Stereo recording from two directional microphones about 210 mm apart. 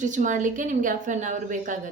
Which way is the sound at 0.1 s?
35° right (ahead or behind).